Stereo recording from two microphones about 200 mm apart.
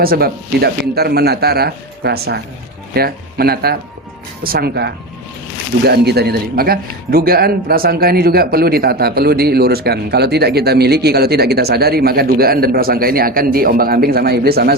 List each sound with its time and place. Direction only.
0.0 s speech: 50° right (ahead or behind)